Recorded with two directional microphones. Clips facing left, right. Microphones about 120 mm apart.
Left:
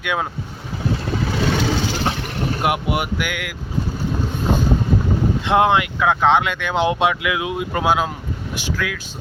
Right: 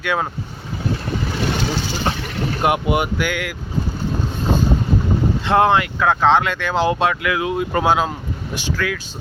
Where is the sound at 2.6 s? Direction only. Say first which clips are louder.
Right 4 dB; 5° left (ahead or behind).